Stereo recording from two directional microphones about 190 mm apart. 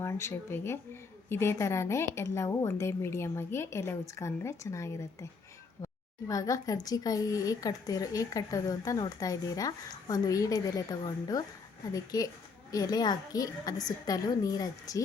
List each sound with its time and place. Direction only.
0.0 s a woman's voice: 15° left (ahead or behind)